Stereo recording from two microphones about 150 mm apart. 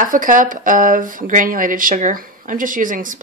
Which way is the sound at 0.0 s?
65° right (ahead or behind).